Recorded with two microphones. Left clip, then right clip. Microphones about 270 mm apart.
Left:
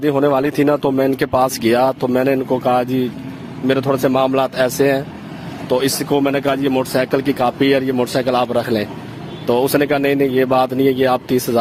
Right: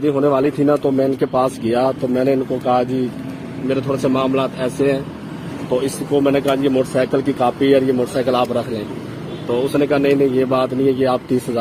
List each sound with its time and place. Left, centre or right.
0.0 s speech: left
6.1 s speech: left